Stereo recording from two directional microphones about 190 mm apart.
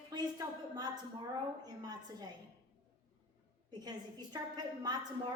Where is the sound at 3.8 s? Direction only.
20° right (ahead or behind).